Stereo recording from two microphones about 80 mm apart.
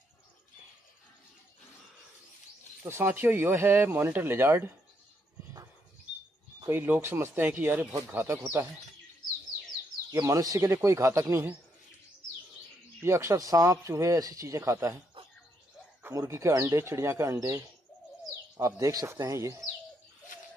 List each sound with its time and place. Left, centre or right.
2.8 s speech: right
6.7 s speech: right
10.2 s speech: right
13.0 s speech: right
16.2 s speech: right